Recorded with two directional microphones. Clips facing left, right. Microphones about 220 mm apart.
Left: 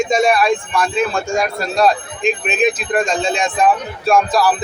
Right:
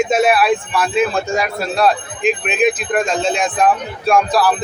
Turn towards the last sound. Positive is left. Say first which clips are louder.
# even
turn(degrees=0)  # may be behind; listen again after turning